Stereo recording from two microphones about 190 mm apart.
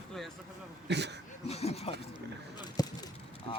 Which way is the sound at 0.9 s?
65° right (ahead or behind).